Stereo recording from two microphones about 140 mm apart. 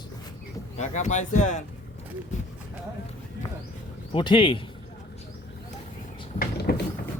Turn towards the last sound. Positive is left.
turn(degrees=90)